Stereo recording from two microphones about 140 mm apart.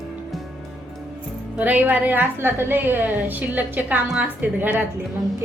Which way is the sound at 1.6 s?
10° right (ahead or behind).